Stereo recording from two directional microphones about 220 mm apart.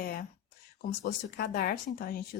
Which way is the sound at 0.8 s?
45° left (ahead or behind).